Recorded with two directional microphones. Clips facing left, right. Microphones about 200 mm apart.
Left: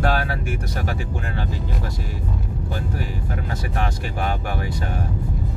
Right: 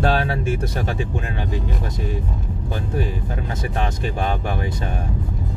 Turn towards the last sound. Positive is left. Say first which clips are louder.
# right 2 dB
turn(degrees=-20)  # may be behind; listen again after turning